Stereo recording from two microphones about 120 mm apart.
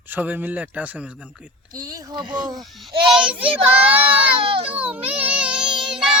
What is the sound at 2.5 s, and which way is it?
Speech, 5° right (ahead or behind).